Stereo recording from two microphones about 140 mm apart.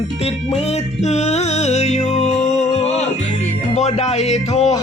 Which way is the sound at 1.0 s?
50° left (ahead or behind).